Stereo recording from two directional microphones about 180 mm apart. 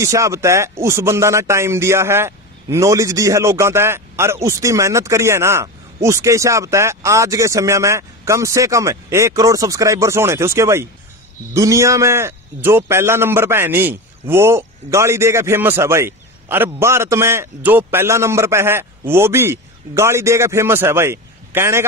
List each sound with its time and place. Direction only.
0.0 s speech: 15° right (ahead or behind)